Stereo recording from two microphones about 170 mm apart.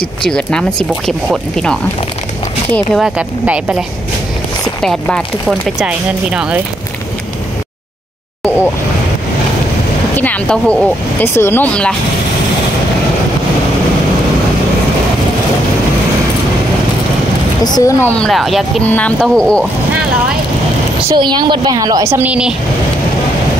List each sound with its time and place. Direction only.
0.2 s speech: 5° left (ahead or behind)
4.8 s speech: 5° left (ahead or behind)
10.1 s speech: 10° left (ahead or behind)
17.6 s speech: 20° left (ahead or behind)
18.1 s speech: centre (ahead or behind)
21.1 s a woman's voice: 25° right (ahead or behind); by 22.6 s 5° right (ahead or behind)